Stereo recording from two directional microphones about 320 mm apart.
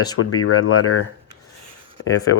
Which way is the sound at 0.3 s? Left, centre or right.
Left.